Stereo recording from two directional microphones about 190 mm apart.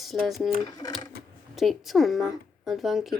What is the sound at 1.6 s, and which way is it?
A woman's voice, centre (ahead or behind).